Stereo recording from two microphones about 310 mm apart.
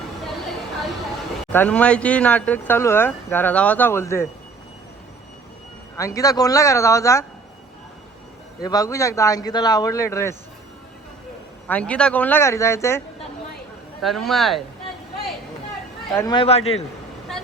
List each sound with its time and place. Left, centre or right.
1.5 s speech: centre
6.0 s speech: centre
8.6 s speech: centre
11.7 s speech: centre
16.1 s speech: centre